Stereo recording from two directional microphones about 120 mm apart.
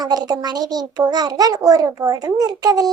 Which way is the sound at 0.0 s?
35° right (ahead or behind).